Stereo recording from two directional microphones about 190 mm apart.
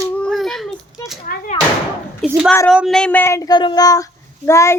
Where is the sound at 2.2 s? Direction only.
5° right (ahead or behind); by 4.7 s 15° left (ahead or behind).